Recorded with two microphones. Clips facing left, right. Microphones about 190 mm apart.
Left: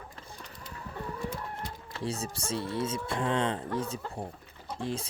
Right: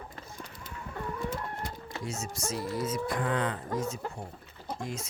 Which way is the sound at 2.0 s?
30° left (ahead or behind).